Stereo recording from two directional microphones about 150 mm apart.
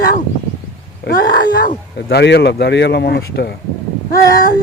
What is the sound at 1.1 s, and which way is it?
Speech, 90° left.